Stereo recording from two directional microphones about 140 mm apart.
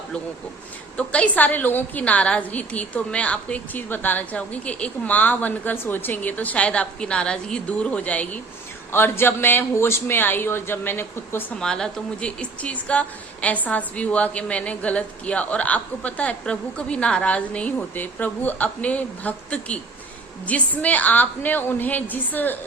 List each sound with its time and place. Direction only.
0.9 s a woman's voice: 10° left (ahead or behind)
11.6 s a woman's voice: 5° left (ahead or behind)